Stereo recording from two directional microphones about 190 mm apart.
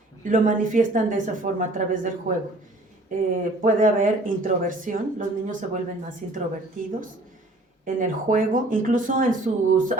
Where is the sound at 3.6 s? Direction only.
45° right (ahead or behind).